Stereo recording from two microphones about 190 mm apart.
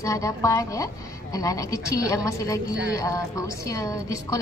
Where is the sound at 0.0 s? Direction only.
15° left (ahead or behind).